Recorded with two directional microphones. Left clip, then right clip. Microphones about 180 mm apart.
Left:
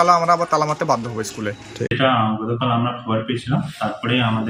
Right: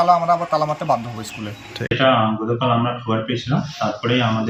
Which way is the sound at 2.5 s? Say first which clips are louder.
Right 2 dB; 5° right (ahead or behind).